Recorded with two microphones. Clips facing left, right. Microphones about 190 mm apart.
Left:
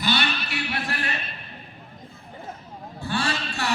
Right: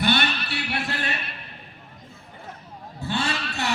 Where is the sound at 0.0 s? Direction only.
55° right (ahead or behind).